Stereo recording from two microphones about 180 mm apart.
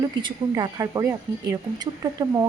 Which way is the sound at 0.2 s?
25° right (ahead or behind).